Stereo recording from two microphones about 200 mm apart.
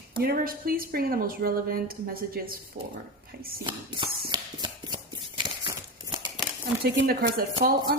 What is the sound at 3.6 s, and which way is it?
Speech, 25° right (ahead or behind).